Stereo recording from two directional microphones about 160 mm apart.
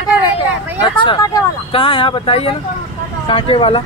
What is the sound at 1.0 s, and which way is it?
Speech, 25° left (ahead or behind).